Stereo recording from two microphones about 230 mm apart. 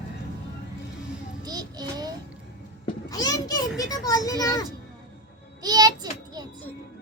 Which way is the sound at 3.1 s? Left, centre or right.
Centre.